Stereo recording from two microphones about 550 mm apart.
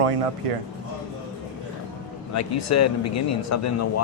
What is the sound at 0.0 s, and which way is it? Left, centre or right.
Speech, right.